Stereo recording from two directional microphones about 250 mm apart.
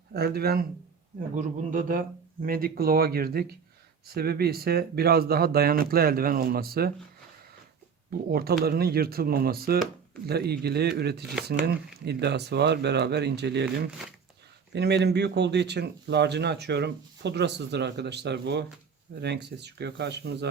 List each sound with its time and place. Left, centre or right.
0.1 s speech: right
8.3 s speech: right
14.7 s speech: right